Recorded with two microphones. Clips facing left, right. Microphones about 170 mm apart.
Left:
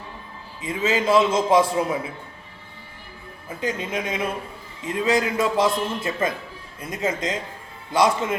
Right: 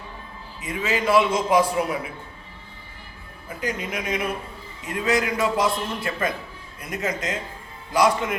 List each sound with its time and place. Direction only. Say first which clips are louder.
0.6 s a man's voice: left 2 dB; 25° left (ahead or behind)
3.6 s a man's voice: left 2 dB; 25° left (ahead or behind)